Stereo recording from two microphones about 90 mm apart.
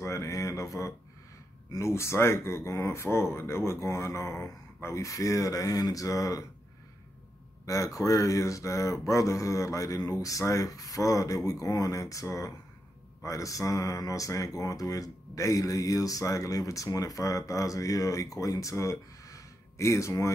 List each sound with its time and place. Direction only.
0.0 s speech: 35° left (ahead or behind)
7.6 s speech: 35° left (ahead or behind)